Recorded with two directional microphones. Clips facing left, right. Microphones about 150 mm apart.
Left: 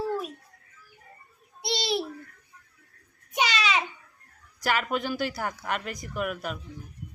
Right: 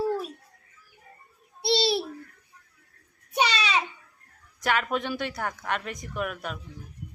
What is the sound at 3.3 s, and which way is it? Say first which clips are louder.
Babbling: right 1 dB; 30° right (ahead or behind).